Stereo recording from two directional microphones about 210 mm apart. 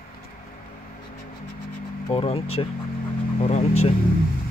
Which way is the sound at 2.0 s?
25° left (ahead or behind).